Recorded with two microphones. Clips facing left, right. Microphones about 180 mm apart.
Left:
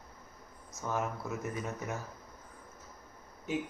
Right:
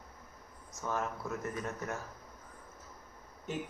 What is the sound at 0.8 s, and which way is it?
Speech, 5° left (ahead or behind).